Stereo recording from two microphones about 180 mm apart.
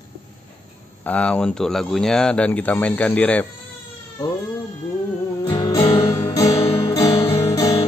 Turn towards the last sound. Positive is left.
turn(degrees=20)  # may be behind; listen again after turning